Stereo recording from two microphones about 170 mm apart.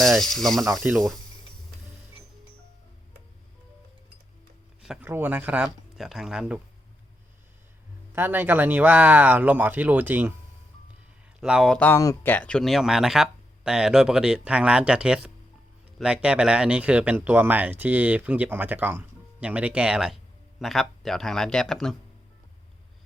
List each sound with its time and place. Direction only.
0.0 s speech: centre (ahead or behind)
4.8 s speech: 5° right (ahead or behind)
8.1 s speech: 15° right (ahead or behind)
11.3 s speech: 5° right (ahead or behind)